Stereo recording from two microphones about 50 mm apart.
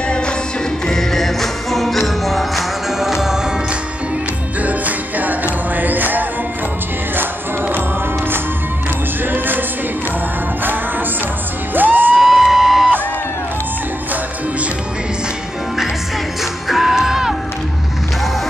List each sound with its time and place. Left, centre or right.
0.8 s music: centre
4.6 s music: right
9.2 s music: right
11.7 s music: right
12.2 s a sound: centre
16.6 s music: centre